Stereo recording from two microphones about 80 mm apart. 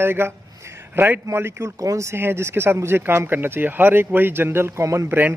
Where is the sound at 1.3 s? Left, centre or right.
Right.